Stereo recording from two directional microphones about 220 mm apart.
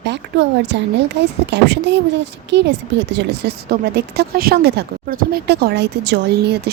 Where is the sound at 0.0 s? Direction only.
55° right (ahead or behind).